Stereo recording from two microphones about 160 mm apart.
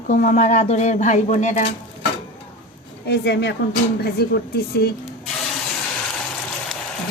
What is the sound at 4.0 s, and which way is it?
Speech, 80° left.